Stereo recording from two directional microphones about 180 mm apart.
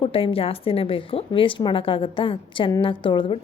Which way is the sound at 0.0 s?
30° left (ahead or behind).